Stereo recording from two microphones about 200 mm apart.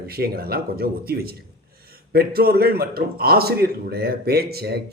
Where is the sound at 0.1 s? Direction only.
50° right (ahead or behind).